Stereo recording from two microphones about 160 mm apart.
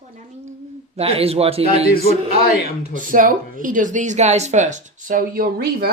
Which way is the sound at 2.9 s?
55° right (ahead or behind).